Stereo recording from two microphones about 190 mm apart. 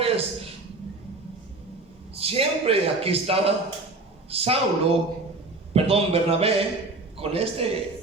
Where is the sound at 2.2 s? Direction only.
30° right (ahead or behind).